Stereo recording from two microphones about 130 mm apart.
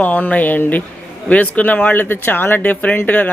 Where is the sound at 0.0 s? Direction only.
10° left (ahead or behind).